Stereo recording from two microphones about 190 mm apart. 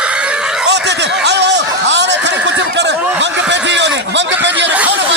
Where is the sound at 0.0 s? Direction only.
5° right (ahead or behind).